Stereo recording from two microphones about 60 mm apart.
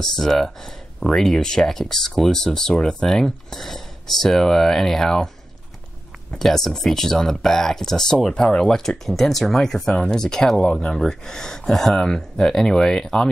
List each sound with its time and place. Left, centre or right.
0.0 s speech: centre
6.3 s speech: centre